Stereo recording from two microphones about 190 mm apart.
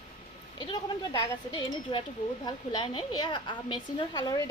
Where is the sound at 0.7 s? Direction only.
25° left (ahead or behind).